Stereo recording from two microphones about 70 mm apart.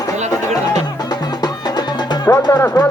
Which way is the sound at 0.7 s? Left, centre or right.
Left.